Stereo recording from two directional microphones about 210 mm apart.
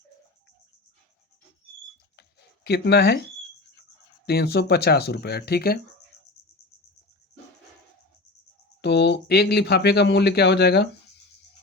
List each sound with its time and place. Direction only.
2.6 s speech: 50° left (ahead or behind)
4.3 s speech: 50° left (ahead or behind)
8.8 s speech: 55° left (ahead or behind)